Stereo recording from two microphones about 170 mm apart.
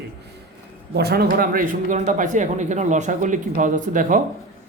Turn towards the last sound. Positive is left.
turn(degrees=-50)  # may be behind; listen again after turning